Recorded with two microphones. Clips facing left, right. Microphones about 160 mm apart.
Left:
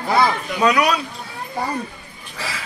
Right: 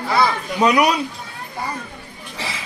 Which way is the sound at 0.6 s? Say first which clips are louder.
Right 1 dB; 20° right (ahead or behind).